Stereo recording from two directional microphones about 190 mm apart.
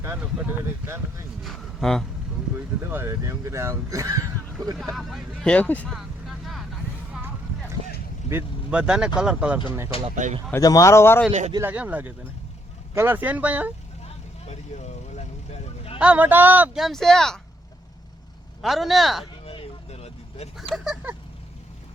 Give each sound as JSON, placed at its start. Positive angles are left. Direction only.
{"t": 1.5, "sound": "speech", "side_deg": 0}
{"t": 2.9, "sound": "speech", "side_deg": -10}
{"t": 4.9, "sound": "speech", "side_deg": 0}
{"t": 8.3, "sound": "speech", "side_deg": -10}
{"t": 10.2, "sound": "speech", "side_deg": -40}
{"t": 10.5, "sound": "speech", "side_deg": 20}
{"t": 11.3, "sound": "speech", "side_deg": -35}
{"t": 11.5, "sound": "speech", "side_deg": -10}
{"t": 14.0, "sound": "vehicle", "side_deg": 35}
{"t": 16.0, "sound": "speech", "side_deg": -5}
{"t": 18.6, "sound": "speech", "side_deg": 0}
{"t": 19.5, "sound": "vehicle", "side_deg": 30}
{"t": 20.7, "sound": "speech", "side_deg": -5}